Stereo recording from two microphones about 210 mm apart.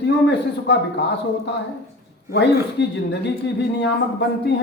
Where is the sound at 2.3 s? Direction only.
55° left (ahead or behind).